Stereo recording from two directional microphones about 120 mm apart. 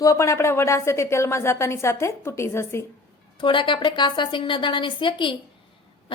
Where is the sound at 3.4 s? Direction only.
45° left (ahead or behind).